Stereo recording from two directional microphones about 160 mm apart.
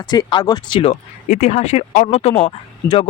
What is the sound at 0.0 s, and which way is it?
A man's voice, 25° left (ahead or behind).